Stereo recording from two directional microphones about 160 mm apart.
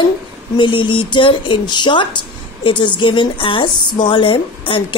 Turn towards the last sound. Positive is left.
turn(degrees=30)  # may be behind; listen again after turning